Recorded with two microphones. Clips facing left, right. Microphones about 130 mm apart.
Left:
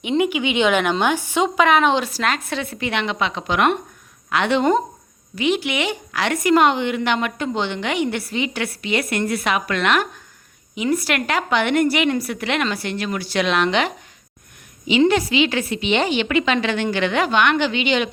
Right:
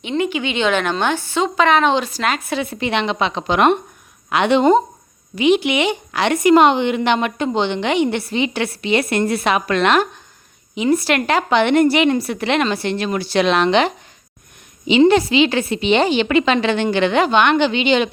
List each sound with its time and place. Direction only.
0.0 s a woman's voice: 10° left (ahead or behind); by 2.6 s 5° right (ahead or behind)
2.6 s a woman's voice: 25° right (ahead or behind)